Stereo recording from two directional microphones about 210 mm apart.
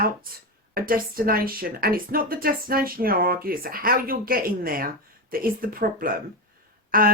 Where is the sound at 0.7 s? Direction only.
45° right (ahead or behind).